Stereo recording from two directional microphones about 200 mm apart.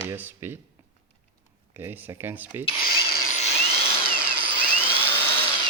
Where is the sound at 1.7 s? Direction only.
10° right (ahead or behind).